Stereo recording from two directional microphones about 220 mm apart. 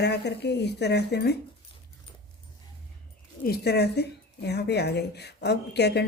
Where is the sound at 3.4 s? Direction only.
45° left (ahead or behind).